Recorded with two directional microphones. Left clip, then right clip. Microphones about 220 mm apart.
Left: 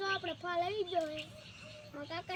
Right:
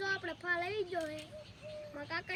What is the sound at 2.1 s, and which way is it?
Speech, 5° right (ahead or behind).